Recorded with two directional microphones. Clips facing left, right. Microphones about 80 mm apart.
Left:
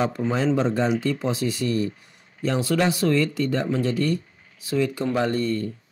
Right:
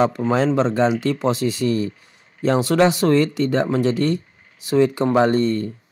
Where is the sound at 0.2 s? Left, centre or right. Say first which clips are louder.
Right 4 dB; right.